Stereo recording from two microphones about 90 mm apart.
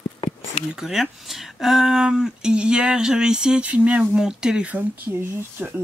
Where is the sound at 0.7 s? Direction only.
5° right (ahead or behind).